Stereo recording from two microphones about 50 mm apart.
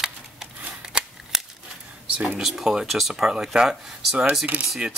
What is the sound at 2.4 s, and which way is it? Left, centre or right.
Speech, centre.